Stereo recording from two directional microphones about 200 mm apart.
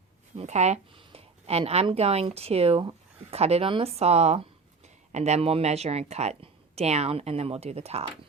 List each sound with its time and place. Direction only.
0.3 s speech: 35° right (ahead or behind)